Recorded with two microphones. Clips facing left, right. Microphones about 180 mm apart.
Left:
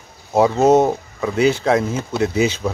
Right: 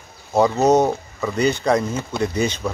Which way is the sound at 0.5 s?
25° left (ahead or behind).